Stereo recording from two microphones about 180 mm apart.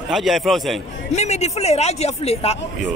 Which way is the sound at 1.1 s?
40° left (ahead or behind).